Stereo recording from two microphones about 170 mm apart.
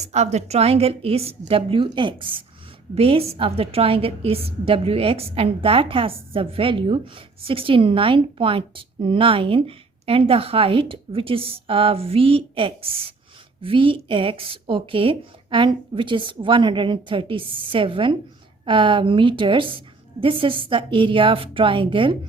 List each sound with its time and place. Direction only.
0.0 s a woman's voice: 40° right (ahead or behind)